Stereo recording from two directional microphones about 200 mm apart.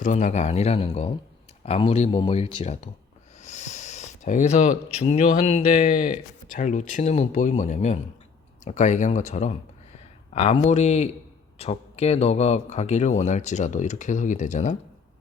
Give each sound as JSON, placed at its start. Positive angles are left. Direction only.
{"t": 0.0, "sound": "speech", "side_deg": 40}